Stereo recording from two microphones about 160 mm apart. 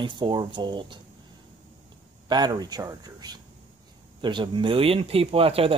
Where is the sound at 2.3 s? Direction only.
25° right (ahead or behind).